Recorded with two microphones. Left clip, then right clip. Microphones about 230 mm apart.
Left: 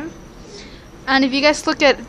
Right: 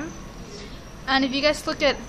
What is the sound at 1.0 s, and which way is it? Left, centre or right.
Speech, left.